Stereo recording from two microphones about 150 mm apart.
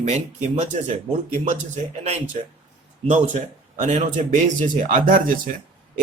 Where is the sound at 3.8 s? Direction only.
50° right (ahead or behind).